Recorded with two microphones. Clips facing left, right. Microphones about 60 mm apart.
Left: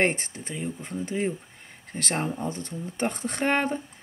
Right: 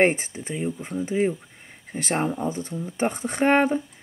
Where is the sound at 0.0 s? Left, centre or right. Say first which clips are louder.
Right 5 dB; centre.